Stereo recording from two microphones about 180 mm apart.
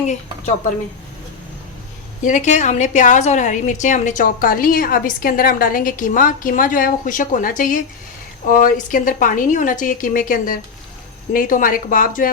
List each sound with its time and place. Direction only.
2.2 s a woman's voice: 45° left (ahead or behind)